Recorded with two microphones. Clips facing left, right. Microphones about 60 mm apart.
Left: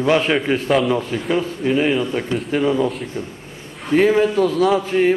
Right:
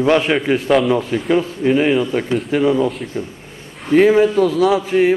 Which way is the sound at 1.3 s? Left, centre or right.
Centre.